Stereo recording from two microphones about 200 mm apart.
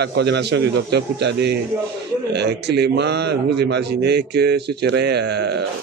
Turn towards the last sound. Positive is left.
turn(degrees=-55)  # may be behind; listen again after turning